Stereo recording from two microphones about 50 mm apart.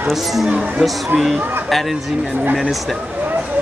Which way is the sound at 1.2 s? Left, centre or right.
Centre.